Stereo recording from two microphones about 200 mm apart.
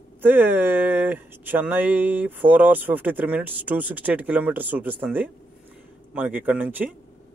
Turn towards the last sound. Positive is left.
turn(degrees=-10)  # may be behind; listen again after turning